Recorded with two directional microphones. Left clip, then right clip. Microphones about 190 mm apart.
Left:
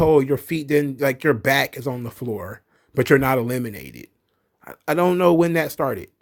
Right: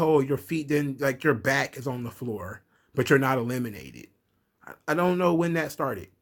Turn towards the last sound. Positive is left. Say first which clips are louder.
# left 6 dB
turn(degrees=40)  # may be behind; listen again after turning